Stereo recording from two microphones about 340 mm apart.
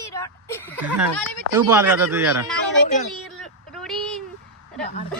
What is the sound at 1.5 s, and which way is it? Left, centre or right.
Speech, centre.